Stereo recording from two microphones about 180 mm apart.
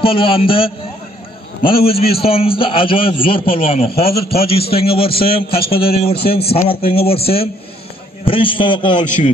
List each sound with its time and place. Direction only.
0.0 s a man's voice: 30° left (ahead or behind)